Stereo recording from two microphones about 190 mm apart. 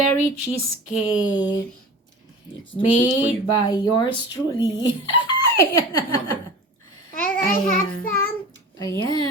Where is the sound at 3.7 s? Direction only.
25° left (ahead or behind).